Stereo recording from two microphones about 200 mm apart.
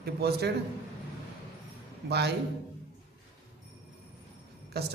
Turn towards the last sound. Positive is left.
turn(degrees=-55)  # may be behind; listen again after turning